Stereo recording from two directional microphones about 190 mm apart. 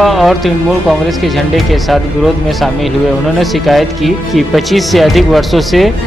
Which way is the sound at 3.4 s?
Centre (ahead or behind).